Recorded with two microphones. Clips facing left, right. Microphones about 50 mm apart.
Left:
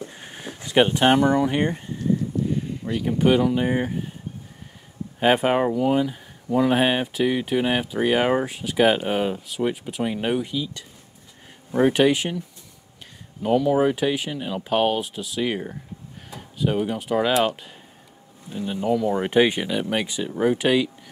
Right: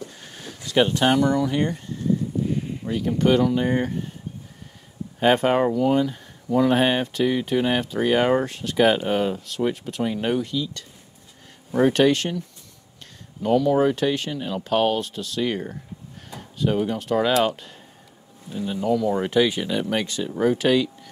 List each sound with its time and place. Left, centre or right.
0.0 s a sound: left
3.0 s speech: centre
5.2 s speech: centre
19.2 s speech: left
19.7 s speech: centre